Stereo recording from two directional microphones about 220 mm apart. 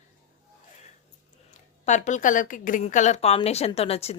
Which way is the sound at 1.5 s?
35° left (ahead or behind).